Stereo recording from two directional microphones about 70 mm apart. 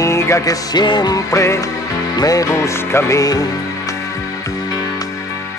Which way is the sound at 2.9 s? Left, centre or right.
Left.